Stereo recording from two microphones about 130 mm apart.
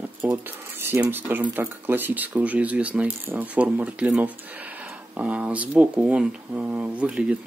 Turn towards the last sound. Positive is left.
turn(degrees=-10)  # may be behind; listen again after turning